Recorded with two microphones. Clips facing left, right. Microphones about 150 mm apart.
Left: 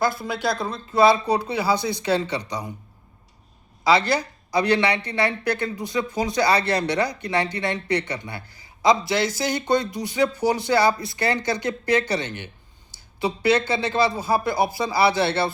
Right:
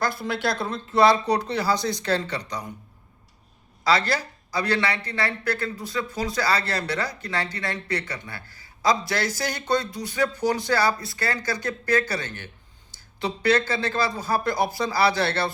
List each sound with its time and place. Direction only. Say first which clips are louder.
0.4 s speech: left 3 dB; centre (ahead or behind)
3.8 s speech: left 3 dB; 15° left (ahead or behind)